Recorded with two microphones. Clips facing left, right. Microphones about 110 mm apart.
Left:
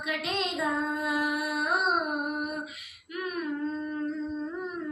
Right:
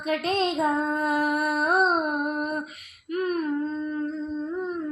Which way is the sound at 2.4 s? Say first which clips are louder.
Right 5 dB; 50° right (ahead or behind).